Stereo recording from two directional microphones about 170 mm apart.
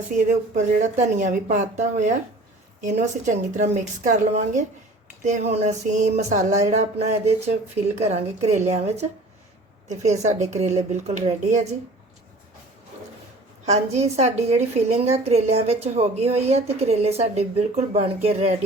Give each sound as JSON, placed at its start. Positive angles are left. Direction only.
{"t": 0.3, "sound": "a woman's voice", "side_deg": -45}
{"t": 13.7, "sound": "a woman's voice", "side_deg": -40}